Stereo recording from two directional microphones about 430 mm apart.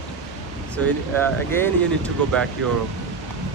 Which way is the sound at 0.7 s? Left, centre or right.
Centre.